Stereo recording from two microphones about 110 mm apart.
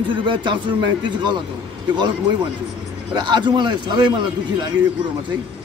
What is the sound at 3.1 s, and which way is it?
A man's voice, 45° right (ahead or behind).